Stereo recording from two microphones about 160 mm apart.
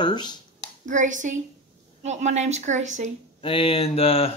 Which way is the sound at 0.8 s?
50° right (ahead or behind).